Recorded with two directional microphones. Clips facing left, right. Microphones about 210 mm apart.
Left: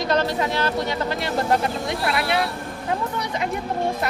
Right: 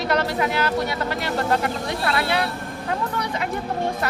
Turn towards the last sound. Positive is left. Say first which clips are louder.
# even
turn(degrees=20)  # may be behind; listen again after turning